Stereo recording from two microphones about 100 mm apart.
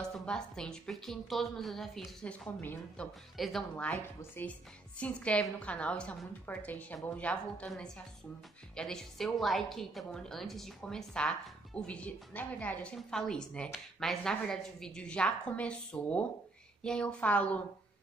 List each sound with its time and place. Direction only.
0.0 s a woman's voice: 5° left (ahead or behind)
3.3 s a woman's voice: centre (ahead or behind)
3.9 s a woman's voice: 25° left (ahead or behind)
4.9 s a woman's voice: 10° left (ahead or behind)